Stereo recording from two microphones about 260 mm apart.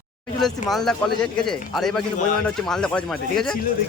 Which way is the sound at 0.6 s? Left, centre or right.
Centre.